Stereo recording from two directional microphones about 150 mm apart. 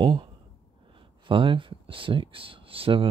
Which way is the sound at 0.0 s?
35° right (ahead or behind).